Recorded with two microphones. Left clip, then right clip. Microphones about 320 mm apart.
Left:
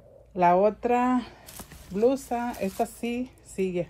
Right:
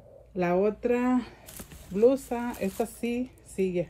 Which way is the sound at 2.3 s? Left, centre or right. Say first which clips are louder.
Left 2 dB; left.